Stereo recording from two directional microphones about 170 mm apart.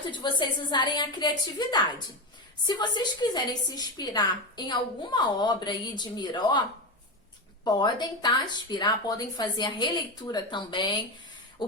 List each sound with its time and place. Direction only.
0.1 s a woman's voice: 25° left (ahead or behind)